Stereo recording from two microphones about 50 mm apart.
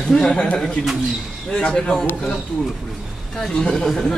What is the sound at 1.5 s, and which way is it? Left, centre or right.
Speech, centre.